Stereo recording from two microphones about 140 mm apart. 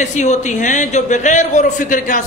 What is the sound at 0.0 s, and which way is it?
A man's voice, 60° left (ahead or behind).